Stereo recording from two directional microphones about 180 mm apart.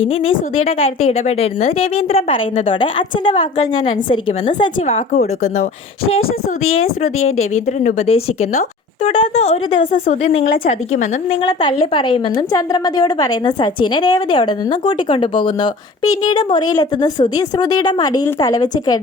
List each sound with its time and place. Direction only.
0.1 s a woman's voice: 30° left (ahead or behind)
4.9 s a woman's voice: 40° left (ahead or behind)
6.7 s a woman's voice: 35° left (ahead or behind)
11.4 s a woman's voice: 25° left (ahead or behind)